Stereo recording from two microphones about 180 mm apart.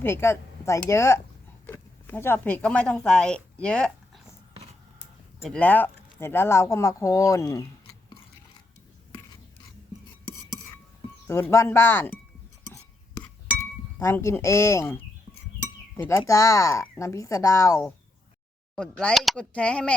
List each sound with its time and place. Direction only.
0.0 s speech: 15° left (ahead or behind)
5.4 s speech: 5° left (ahead or behind)
11.3 s speech: 15° left (ahead or behind)
13.6 s speech: 15° left (ahead or behind)
18.8 s speech: 5° left (ahead or behind)